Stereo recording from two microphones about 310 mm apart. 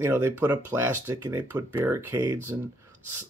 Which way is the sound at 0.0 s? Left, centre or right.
Centre.